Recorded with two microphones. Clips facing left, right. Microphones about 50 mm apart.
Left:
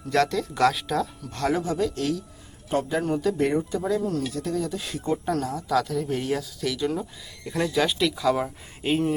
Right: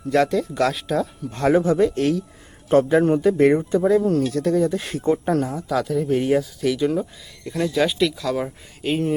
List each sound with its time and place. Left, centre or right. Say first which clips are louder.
0.1 s speech: right 4 dB; centre
1.2 s speech: right 4 dB; right
1.5 s speech: right 8 dB; right
4.3 s speech: right 8 dB; right
5.0 s speech: right 6 dB; right
5.6 s speech: right 3 dB; centre
6.9 s speech: right 6 dB; centre
7.5 s speech: right 3 dB; centre
8.9 s speech: right 1 dB; centre